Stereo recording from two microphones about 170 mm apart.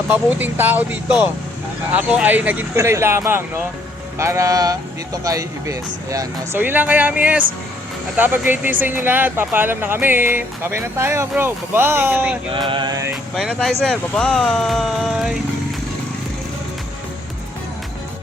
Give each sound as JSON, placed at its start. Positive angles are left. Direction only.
{"t": 0.3, "sound": "speech", "side_deg": -10}
{"t": 2.0, "sound": "speech", "side_deg": -5}
{"t": 12.5, "sound": "a sound", "side_deg": -25}
{"t": 13.3, "sound": "speech", "side_deg": 0}